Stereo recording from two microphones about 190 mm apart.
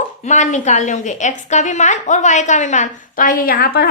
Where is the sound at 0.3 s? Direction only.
40° left (ahead or behind).